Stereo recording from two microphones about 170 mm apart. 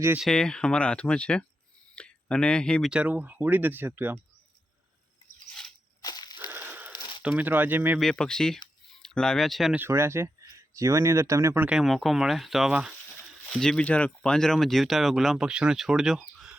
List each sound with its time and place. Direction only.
0.2 s speech: 5° left (ahead or behind)
2.9 s speech: 10° right (ahead or behind)
6.0 s crushing: 25° left (ahead or behind)
6.5 s a sound: 10° right (ahead or behind)
7.2 s speech: 10° right (ahead or behind)
8.0 s speech: 5° left (ahead or behind)
9.8 s speech: 15° right (ahead or behind)